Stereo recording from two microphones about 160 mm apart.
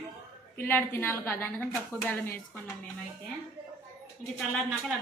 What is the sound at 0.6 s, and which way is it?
A woman's voice, 15° left (ahead or behind).